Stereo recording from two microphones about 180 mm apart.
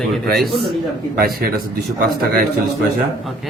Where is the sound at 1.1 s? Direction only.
60° right (ahead or behind).